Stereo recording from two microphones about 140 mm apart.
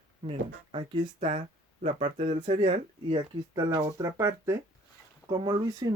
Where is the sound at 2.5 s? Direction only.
40° right (ahead or behind).